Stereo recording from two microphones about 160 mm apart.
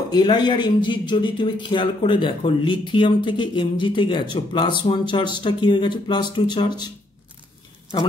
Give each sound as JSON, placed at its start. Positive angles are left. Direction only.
{"t": 0.1, "sound": "speech", "side_deg": 25}